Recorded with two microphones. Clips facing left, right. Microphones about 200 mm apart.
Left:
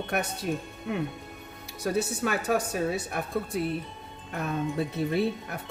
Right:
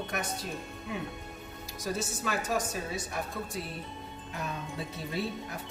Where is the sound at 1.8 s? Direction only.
60° left (ahead or behind).